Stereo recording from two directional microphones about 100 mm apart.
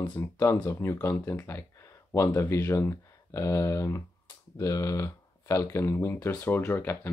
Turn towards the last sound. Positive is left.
turn(degrees=25)  # may be behind; listen again after turning